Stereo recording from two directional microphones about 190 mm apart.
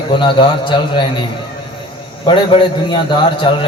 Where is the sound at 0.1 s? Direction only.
25° left (ahead or behind).